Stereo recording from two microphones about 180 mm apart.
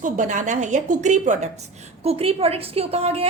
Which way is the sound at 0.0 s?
45° right (ahead or behind).